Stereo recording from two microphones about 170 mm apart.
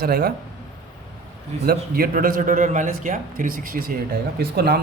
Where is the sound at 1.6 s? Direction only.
60° right (ahead or behind).